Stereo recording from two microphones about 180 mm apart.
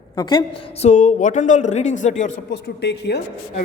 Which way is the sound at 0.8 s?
45° left (ahead or behind).